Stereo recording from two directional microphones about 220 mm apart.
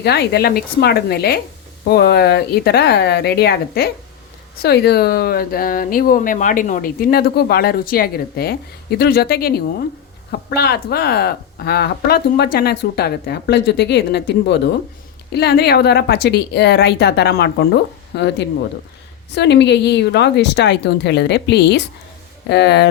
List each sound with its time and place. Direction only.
0.0 s speech: 50° left (ahead or behind)